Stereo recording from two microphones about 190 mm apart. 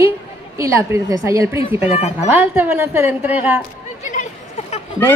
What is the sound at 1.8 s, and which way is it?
Speech, 35° left (ahead or behind).